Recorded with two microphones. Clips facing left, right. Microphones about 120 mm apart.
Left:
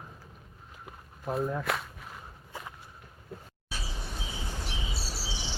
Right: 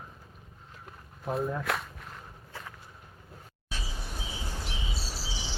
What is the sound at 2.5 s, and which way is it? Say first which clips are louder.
Walk: left 2 dB; 15° left (ahead or behind).